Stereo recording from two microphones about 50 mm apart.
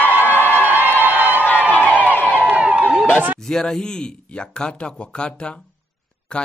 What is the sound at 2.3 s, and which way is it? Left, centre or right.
Crowd, right.